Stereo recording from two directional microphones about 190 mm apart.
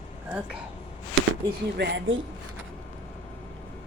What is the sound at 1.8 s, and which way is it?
Speech, 70° right (ahead or behind).